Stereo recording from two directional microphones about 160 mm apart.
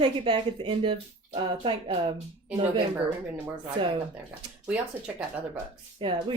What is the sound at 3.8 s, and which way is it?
Speech, 35° right (ahead or behind).